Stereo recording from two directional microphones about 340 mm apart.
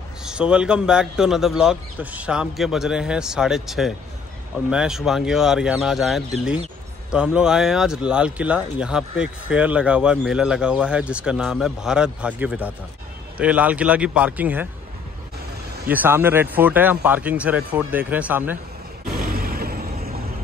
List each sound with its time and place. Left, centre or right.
0.2 s speech: centre
15.9 s speech: centre
19.0 s a sound: right